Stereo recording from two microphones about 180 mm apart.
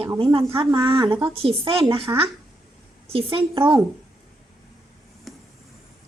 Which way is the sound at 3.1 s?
30° right (ahead or behind).